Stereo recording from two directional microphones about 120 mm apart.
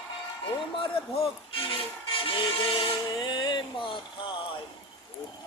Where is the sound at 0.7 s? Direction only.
45° left (ahead or behind).